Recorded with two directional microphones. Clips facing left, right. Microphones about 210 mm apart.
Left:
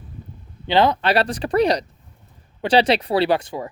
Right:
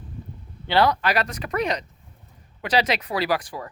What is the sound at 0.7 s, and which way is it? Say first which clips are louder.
A woman's voice: left 3 dB; 20° left (ahead or behind).